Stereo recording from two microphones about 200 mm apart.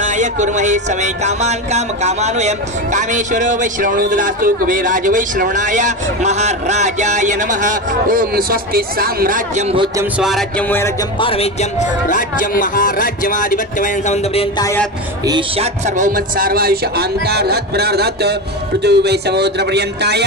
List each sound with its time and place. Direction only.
0.0 s music: 35° right (ahead or behind)
9.9 s speech: 5° right (ahead or behind)
11.1 s a man's voice: 30° left (ahead or behind)
14.6 s speech: 10° left (ahead or behind)
15.2 s a man's voice: 25° right (ahead or behind); by 20.2 s 55° right (ahead or behind)